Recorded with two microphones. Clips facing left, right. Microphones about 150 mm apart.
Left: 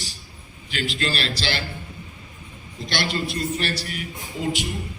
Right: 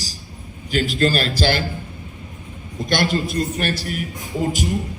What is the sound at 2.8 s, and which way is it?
A man's voice, 45° right (ahead or behind).